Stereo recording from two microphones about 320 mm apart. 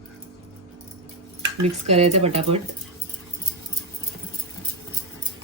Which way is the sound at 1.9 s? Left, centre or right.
Centre.